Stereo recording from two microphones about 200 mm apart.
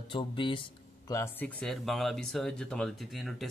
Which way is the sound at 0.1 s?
25° left (ahead or behind).